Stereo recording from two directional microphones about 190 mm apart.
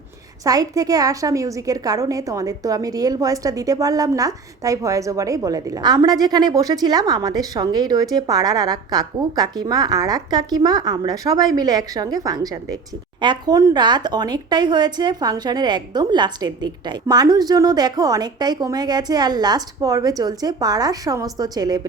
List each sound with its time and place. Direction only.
0.4 s a woman's voice: 20° right (ahead or behind)